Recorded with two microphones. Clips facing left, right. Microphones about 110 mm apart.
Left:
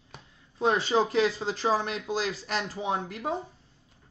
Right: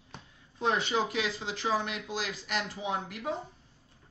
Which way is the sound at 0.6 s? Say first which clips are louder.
Left 5 dB; 35° left (ahead or behind).